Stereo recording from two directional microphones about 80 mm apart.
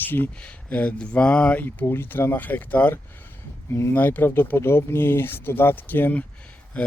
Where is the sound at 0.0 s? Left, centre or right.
Left.